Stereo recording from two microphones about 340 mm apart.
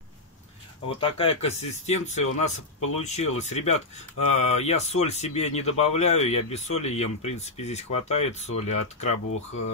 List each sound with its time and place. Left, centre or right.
0.8 s speech: centre